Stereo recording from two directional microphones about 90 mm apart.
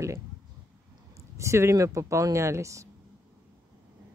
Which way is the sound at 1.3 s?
30° right (ahead or behind).